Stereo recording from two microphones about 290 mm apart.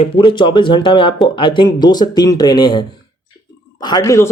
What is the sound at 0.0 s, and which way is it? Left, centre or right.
Speech, centre.